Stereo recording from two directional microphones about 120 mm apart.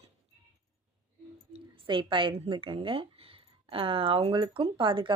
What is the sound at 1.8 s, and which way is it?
A woman's voice, 45° right (ahead or behind).